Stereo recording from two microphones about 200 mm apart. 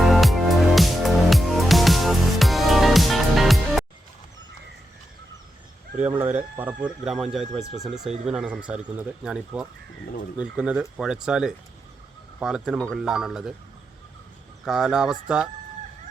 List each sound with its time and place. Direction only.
0.0 s music: centre (ahead or behind)
6.1 s speech: 10° right (ahead or behind)
14.6 s speech: 5° right (ahead or behind)